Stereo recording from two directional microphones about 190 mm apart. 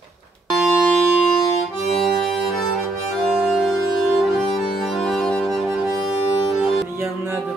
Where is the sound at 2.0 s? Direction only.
Centre (ahead or behind).